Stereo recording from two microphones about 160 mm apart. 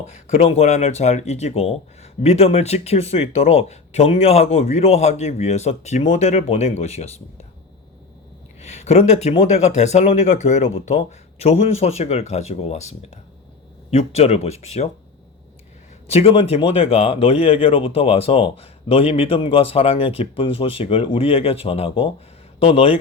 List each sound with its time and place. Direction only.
0.1 s speech: 40° left (ahead or behind)
8.6 s speech: 45° left (ahead or behind)
16.0 s speech: 40° left (ahead or behind)